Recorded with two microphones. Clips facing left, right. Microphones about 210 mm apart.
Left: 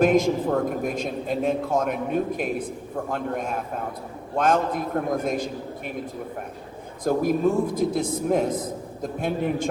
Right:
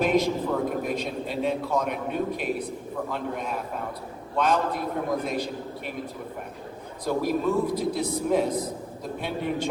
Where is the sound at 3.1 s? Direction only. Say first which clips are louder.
Left 5 dB; 45° left (ahead or behind).